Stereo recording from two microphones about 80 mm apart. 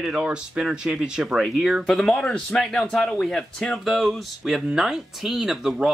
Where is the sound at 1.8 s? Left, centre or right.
Centre.